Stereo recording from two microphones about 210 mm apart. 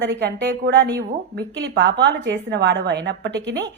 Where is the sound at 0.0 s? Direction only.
55° right (ahead or behind).